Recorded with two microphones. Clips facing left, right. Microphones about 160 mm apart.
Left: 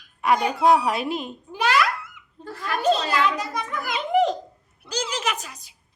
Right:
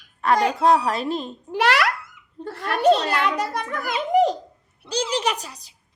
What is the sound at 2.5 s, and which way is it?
A child's voice, 65° right (ahead or behind).